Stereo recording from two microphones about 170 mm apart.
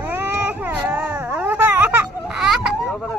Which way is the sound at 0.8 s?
10° right (ahead or behind).